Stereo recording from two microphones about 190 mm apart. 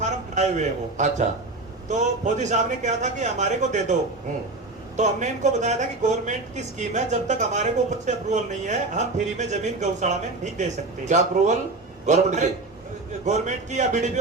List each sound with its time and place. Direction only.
0.0 s a man's voice: 40° right (ahead or behind)
4.9 s speech: 40° right (ahead or behind)